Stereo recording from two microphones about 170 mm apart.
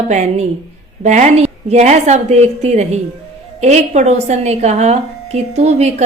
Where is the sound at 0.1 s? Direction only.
45° right (ahead or behind).